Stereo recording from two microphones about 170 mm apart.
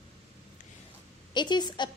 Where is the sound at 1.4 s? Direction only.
25° left (ahead or behind).